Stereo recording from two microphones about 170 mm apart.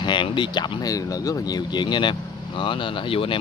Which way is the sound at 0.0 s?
30° left (ahead or behind).